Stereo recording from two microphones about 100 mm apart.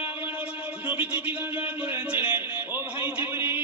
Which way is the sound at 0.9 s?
15° right (ahead or behind).